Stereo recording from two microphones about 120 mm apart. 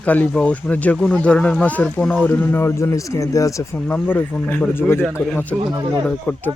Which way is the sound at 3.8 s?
10° left (ahead or behind).